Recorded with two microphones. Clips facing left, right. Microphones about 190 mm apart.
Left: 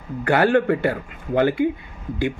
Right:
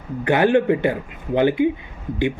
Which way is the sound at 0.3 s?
20° right (ahead or behind).